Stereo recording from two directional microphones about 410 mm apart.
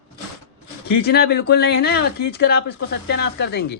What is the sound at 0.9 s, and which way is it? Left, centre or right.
Speech, left.